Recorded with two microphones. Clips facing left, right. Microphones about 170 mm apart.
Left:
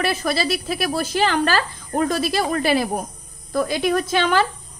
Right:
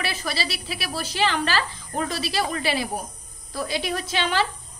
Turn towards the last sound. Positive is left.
turn(degrees=50)  # may be behind; listen again after turning